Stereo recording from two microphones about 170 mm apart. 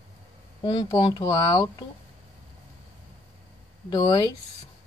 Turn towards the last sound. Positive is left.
turn(degrees=20)  # may be behind; listen again after turning